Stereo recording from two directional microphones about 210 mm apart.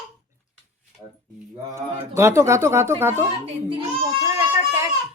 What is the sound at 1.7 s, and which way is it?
Speech, 15° right (ahead or behind).